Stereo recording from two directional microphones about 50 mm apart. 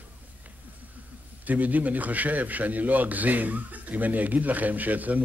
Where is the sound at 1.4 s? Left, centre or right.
Right.